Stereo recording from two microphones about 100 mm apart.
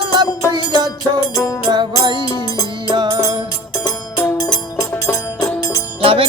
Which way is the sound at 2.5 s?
40° left (ahead or behind).